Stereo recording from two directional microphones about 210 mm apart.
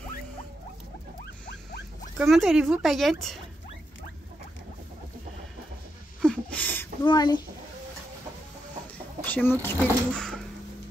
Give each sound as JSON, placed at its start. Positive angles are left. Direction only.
{"t": 2.1, "sound": "speech", "side_deg": 0}
{"t": 6.2, "sound": "a sound", "side_deg": 5}
{"t": 7.1, "sound": "a child's voice", "side_deg": 20}
{"t": 9.2, "sound": "speech", "side_deg": 10}